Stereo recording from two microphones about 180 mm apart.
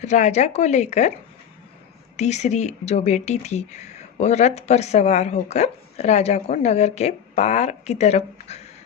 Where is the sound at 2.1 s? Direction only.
40° left (ahead or behind).